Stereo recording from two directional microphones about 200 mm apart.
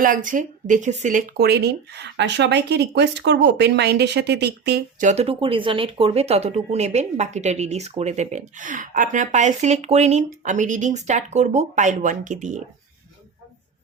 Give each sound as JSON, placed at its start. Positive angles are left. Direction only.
{"t": 0.0, "sound": "speech", "side_deg": -40}
{"t": 4.9, "sound": "speech", "side_deg": -35}